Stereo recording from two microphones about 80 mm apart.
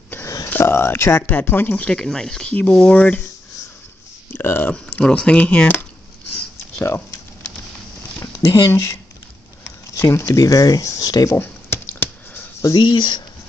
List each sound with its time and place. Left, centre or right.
0.2 s a sound: left
0.5 s speech: left
1.9 s speech: centre
4.3 s speech: left
4.7 s speech: centre
8.5 s speech: left
11.3 s a sound: left
12.7 s speech: left